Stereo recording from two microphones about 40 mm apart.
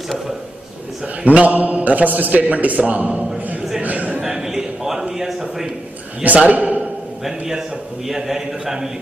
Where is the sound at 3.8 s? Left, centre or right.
Right.